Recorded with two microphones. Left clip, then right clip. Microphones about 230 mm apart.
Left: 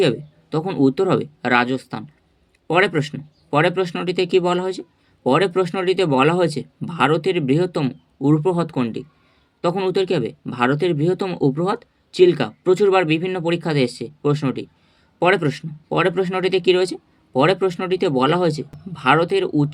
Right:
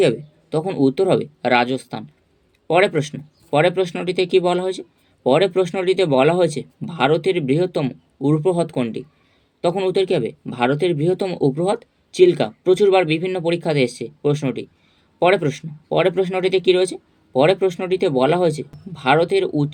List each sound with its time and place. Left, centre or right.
0.0 s speech: centre